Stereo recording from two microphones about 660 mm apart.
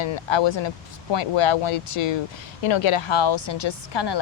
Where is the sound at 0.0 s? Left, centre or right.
Left.